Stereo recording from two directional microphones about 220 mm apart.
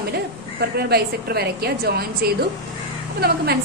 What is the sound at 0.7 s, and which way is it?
A woman's voice, 45° right (ahead or behind).